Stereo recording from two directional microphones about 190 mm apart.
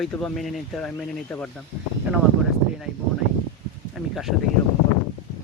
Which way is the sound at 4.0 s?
Centre (ahead or behind).